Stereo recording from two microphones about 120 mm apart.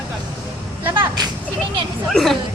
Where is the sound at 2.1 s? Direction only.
Centre (ahead or behind).